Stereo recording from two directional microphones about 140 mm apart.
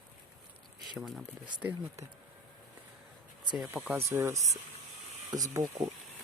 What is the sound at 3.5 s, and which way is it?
Speech, 5° right (ahead or behind).